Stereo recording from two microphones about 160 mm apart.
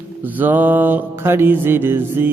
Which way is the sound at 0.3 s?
10° right (ahead or behind).